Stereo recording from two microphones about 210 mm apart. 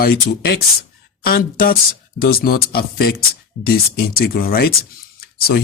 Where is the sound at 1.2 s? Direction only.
45° left (ahead or behind).